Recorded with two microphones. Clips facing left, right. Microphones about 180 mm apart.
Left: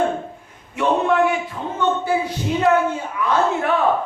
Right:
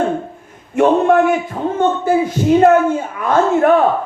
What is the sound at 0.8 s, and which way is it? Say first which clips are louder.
Speech: right 6 dB; 50° right (ahead or behind).